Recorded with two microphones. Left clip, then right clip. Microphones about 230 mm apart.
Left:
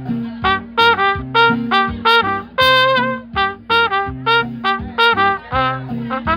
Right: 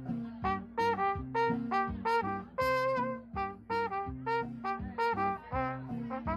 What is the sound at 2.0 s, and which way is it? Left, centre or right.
Music, left.